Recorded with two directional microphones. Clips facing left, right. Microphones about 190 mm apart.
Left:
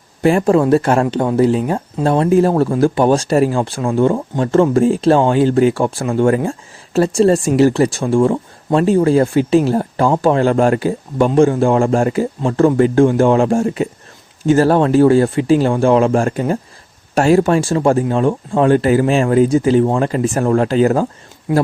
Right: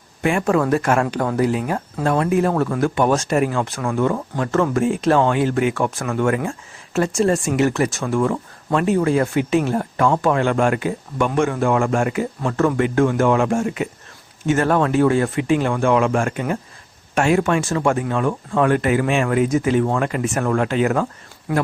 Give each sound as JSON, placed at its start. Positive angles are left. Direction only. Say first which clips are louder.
{"t": 0.2, "sound": "speech", "louder": "left 6 dB", "side_deg": 35}